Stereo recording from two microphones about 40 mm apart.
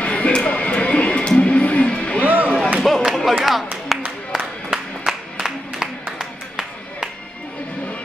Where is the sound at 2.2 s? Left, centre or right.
Right.